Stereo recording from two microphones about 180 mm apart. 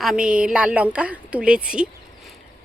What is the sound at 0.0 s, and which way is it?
A woman's voice, 5° right (ahead or behind).